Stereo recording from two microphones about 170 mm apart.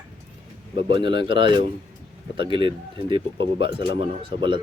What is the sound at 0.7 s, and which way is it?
Speech, 30° right (ahead or behind).